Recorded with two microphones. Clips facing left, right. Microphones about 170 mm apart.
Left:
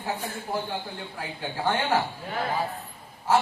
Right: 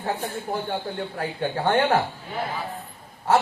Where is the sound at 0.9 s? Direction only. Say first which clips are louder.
Right 8 dB; 60° right (ahead or behind).